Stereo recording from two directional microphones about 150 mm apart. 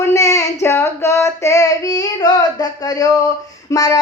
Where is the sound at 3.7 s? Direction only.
25° left (ahead or behind).